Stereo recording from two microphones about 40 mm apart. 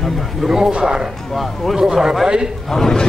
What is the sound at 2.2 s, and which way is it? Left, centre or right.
Speech, right.